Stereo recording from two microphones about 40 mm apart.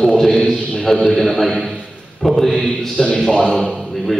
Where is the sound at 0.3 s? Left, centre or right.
Centre.